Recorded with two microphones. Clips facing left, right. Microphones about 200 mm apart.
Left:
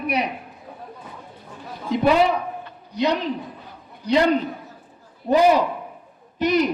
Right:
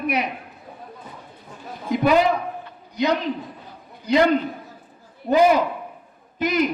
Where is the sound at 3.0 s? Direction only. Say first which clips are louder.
Even; 35° left (ahead or behind).